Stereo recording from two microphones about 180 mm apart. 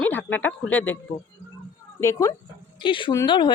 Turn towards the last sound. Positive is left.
turn(degrees=25)  # may be behind; listen again after turning